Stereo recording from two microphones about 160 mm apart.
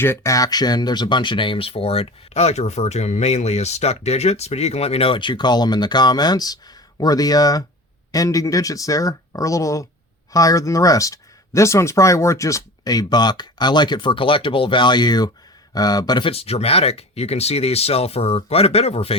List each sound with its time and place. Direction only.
0.0 s speech: 15° left (ahead or behind); by 19.1 s 40° left (ahead or behind)